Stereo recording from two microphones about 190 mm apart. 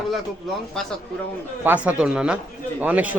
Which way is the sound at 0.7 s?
Centre (ahead or behind).